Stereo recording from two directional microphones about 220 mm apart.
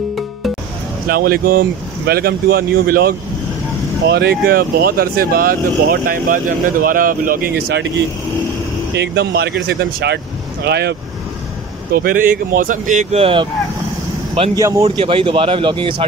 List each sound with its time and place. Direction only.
1.0 s speech: 40° right (ahead or behind)
8.9 s a man's voice: 50° right (ahead or behind); by 16.1 s 20° right (ahead or behind)